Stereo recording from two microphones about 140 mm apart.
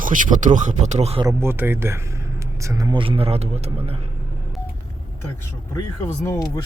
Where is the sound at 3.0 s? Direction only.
45° right (ahead or behind).